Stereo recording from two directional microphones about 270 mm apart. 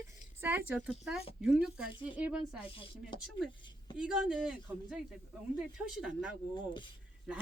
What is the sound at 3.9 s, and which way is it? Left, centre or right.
Speech, centre.